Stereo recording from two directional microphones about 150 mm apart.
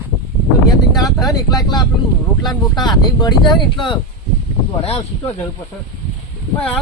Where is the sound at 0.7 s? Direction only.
25° left (ahead or behind); by 5.3 s 40° left (ahead or behind).